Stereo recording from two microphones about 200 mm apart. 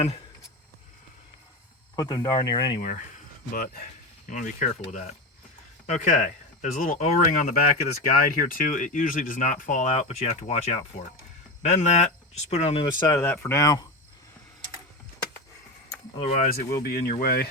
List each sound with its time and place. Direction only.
2.0 s speech: 20° left (ahead or behind)
4.3 s speech: 40° left (ahead or behind); by 13.8 s 15° left (ahead or behind)
16.3 s speech: 45° left (ahead or behind)